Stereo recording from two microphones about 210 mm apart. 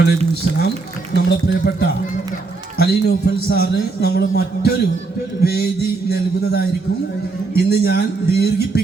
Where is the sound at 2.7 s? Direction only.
50° left (ahead or behind).